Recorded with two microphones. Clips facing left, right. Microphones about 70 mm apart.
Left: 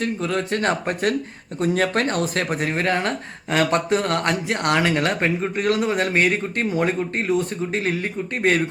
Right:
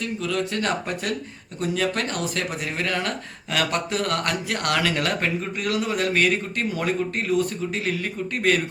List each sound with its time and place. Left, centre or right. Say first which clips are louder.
0.0 s speech: left 3 dB; left